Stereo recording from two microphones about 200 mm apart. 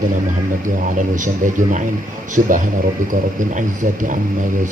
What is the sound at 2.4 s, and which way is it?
Speech, 45° right (ahead or behind).